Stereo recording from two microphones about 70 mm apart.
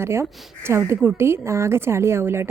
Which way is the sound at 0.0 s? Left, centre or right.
Right.